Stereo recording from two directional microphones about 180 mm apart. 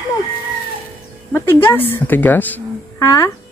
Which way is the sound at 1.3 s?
15° left (ahead or behind).